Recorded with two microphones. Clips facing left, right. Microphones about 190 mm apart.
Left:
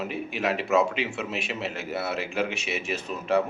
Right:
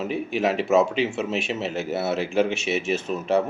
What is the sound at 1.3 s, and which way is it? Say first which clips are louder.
Speech: right 5 dB; 25° right (ahead or behind).